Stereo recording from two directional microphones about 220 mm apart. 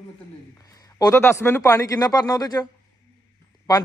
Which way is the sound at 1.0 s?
15° left (ahead or behind).